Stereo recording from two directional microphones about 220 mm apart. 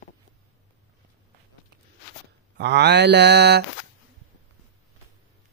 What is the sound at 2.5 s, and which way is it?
Mantra, 50° right (ahead or behind).